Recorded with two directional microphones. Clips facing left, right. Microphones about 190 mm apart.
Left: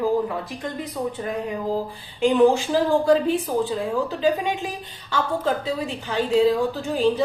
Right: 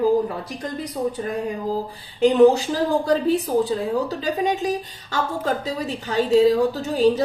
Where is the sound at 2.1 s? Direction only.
40° right (ahead or behind).